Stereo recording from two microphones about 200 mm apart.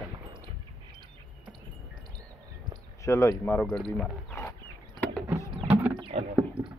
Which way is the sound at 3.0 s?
15° left (ahead or behind).